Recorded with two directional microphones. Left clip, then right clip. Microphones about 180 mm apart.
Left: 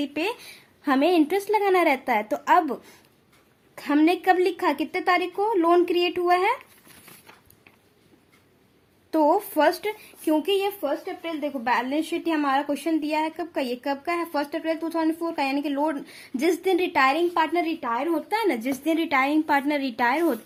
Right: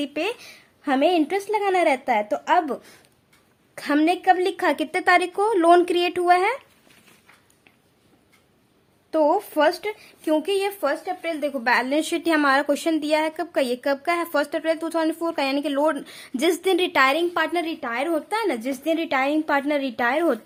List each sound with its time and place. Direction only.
0.0 s a woman's voice: 15° right (ahead or behind)
9.0 s a woman's voice: 5° right (ahead or behind)
10.3 s a woman's voice: 20° right (ahead or behind)